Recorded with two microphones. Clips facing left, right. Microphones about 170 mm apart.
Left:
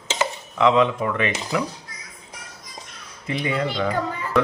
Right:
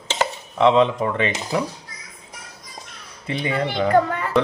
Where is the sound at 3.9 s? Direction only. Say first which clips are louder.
Right 8 dB; 70° right (ahead or behind).